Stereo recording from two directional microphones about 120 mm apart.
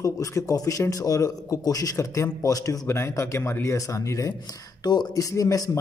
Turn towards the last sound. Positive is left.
turn(degrees=30)  # may be behind; listen again after turning